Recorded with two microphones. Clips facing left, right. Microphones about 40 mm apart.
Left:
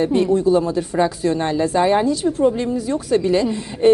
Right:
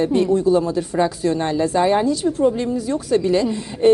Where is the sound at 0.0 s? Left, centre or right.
Left.